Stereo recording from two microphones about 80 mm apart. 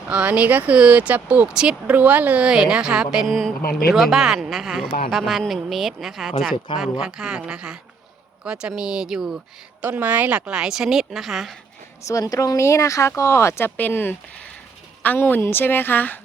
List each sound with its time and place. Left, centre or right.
0.1 s speech: centre
9.8 s speech: right; by 11.5 s centre
12.0 s a woman's voice: left